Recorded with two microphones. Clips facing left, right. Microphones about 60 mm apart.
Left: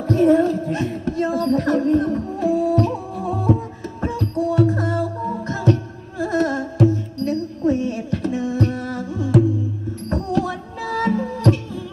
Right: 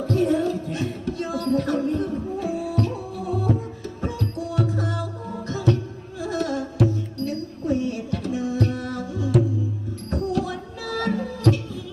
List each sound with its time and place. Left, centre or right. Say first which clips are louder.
0.1 s speech: left 7 dB; left
2.4 s music: left 9 dB; left